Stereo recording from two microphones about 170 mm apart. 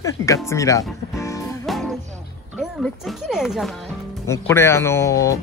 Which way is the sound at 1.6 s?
Centre (ahead or behind).